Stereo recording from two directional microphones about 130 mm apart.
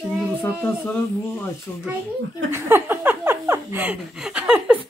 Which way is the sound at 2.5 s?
15° right (ahead or behind).